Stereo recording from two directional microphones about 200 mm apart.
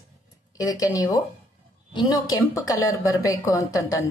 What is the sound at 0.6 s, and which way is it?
Speech, 15° left (ahead or behind).